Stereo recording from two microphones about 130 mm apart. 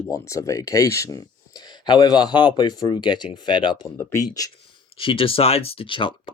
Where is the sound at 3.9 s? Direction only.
25° left (ahead or behind).